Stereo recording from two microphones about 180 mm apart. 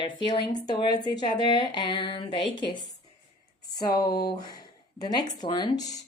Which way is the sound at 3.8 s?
20° left (ahead or behind).